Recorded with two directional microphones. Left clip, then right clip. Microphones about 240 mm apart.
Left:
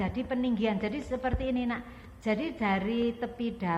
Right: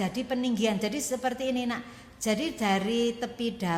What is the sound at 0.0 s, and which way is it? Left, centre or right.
A woman's voice, right.